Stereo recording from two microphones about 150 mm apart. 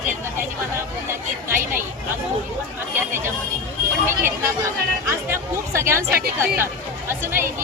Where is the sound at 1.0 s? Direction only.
15° right (ahead or behind).